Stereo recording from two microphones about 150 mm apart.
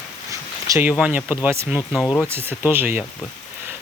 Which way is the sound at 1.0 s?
10° right (ahead or behind).